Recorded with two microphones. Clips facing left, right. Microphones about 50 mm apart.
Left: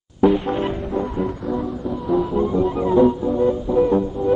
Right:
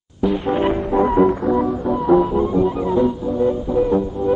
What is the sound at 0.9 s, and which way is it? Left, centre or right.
Music, right.